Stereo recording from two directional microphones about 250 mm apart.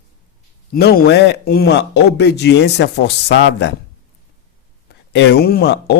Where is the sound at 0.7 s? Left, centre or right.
Left.